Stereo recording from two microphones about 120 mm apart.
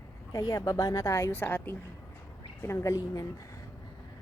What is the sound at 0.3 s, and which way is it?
A woman's voice, 30° left (ahead or behind).